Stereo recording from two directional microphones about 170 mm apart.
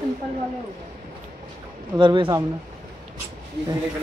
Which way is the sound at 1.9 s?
25° right (ahead or behind).